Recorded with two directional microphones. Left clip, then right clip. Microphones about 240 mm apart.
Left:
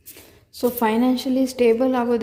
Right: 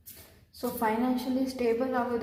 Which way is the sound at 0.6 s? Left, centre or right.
Left.